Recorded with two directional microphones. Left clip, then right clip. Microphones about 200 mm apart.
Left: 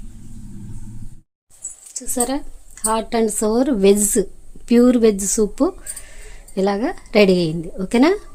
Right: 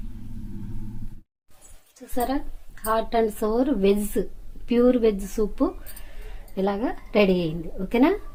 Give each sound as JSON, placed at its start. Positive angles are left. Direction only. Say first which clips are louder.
{"t": 2.8, "sound": "a woman's voice", "louder": "left 3 dB", "side_deg": 70}
{"t": 6.5, "sound": "a woman's voice", "louder": "left 6 dB", "side_deg": 65}